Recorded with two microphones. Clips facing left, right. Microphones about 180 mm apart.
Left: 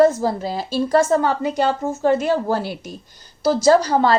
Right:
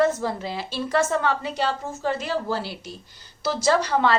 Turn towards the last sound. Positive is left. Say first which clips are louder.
# left 6 dB
turn(degrees=40)  # may be behind; listen again after turning